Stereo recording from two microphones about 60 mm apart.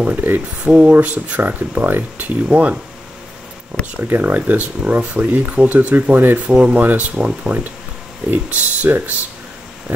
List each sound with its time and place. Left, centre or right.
0.0 s speech: right
0.7 s speech: centre
0.9 s speech: right
2.4 s speech: centre
4.1 s speech: right